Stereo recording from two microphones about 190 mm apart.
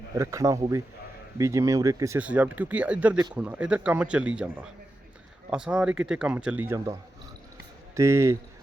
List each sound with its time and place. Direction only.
0.2 s speech: 15° right (ahead or behind)
7.9 s speech: 15° right (ahead or behind)